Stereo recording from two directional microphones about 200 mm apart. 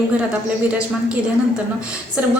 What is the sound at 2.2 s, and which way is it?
Music, 5° right (ahead or behind).